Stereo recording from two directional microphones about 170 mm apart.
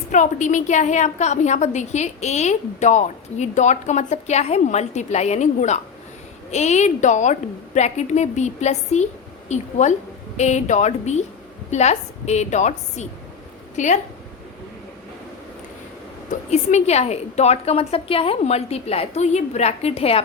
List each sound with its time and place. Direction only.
0.1 s a woman's voice: 45° left (ahead or behind)
16.5 s a woman's voice: 40° left (ahead or behind)